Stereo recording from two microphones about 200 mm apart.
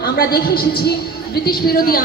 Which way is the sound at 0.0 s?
50° left (ahead or behind).